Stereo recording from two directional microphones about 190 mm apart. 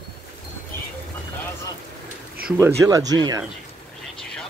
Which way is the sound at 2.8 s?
20° right (ahead or behind).